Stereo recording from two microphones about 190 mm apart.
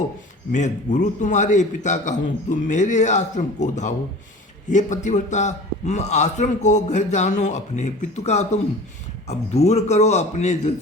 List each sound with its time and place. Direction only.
0.5 s a man's voice: 40° left (ahead or behind)